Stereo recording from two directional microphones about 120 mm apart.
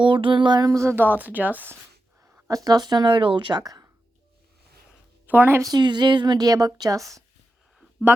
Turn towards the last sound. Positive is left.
turn(degrees=0)  # may be behind; listen again after turning